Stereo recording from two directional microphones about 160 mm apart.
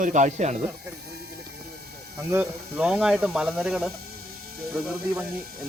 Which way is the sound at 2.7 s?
5° right (ahead or behind).